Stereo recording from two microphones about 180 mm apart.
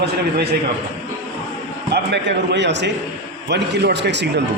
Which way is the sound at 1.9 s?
70° right (ahead or behind).